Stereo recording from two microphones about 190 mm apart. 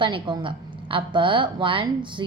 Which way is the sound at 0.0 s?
25° right (ahead or behind).